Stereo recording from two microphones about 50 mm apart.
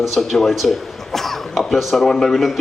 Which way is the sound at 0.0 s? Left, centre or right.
Centre.